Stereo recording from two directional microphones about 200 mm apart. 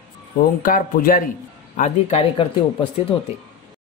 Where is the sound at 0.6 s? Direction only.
45° left (ahead or behind).